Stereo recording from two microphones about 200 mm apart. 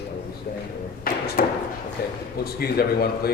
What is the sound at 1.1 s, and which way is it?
Speech, 45° left (ahead or behind).